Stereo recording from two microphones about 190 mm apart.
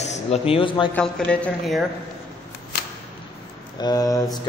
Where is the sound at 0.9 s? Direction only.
5° left (ahead or behind).